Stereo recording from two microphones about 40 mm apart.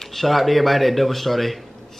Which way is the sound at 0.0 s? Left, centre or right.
Centre.